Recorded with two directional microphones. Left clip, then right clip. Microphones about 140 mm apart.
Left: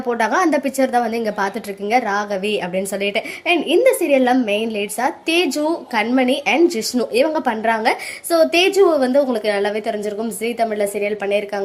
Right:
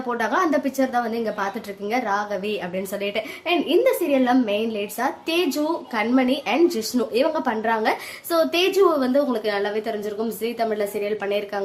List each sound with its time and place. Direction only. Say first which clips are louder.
0.1 s a woman's voice: left 5 dB; 20° left (ahead or behind)